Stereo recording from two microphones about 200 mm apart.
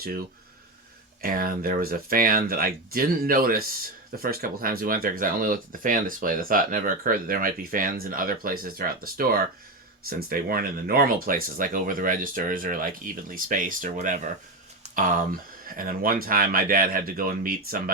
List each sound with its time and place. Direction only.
1.2 s speech: 45° right (ahead or behind)